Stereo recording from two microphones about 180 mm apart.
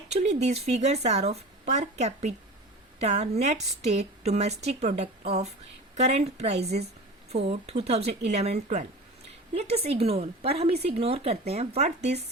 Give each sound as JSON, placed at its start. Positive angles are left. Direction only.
{"t": 0.1, "sound": "speech", "side_deg": -40}